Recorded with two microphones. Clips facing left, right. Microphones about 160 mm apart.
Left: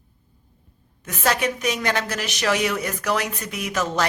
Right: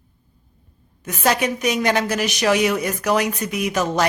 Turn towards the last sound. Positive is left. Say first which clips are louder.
# right 4 dB
turn(degrees=-15)  # may be behind; listen again after turning